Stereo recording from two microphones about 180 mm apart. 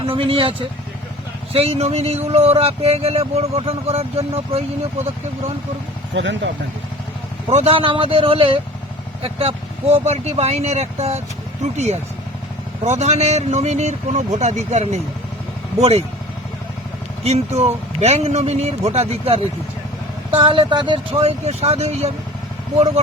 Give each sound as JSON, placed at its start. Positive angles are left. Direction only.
{"t": 0.1, "sound": "speech", "side_deg": -30}
{"t": 6.1, "sound": "speech", "side_deg": -90}
{"t": 7.5, "sound": "speech", "side_deg": -35}
{"t": 12.8, "sound": "speech", "side_deg": -40}
{"t": 17.2, "sound": "speech", "side_deg": -35}